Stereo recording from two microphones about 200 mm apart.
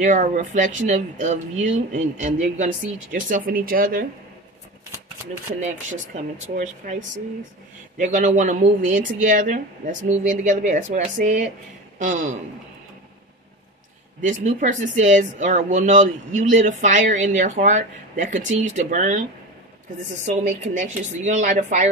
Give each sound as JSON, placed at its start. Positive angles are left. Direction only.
{"t": 0.0, "sound": "speech", "side_deg": -40}
{"t": 6.1, "sound": "speech", "side_deg": -35}
{"t": 8.0, "sound": "speech", "side_deg": -40}
{"t": 14.2, "sound": "speech", "side_deg": -40}
{"t": 20.2, "sound": "speech", "side_deg": -35}